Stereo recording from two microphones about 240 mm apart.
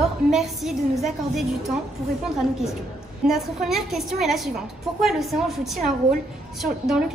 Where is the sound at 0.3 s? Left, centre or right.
Centre.